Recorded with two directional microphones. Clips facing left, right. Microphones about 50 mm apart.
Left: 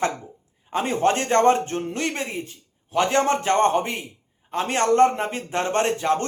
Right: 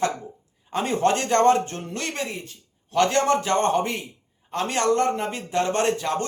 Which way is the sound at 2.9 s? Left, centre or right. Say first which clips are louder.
Even; centre.